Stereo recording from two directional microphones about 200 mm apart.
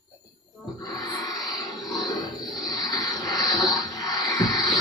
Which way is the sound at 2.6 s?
20° left (ahead or behind).